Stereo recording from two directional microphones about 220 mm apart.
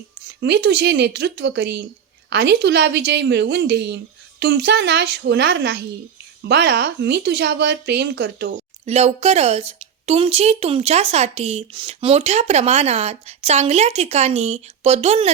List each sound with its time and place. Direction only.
0.4 s a woman's voice: 50° right (ahead or behind)
8.9 s a woman's voice: 30° right (ahead or behind)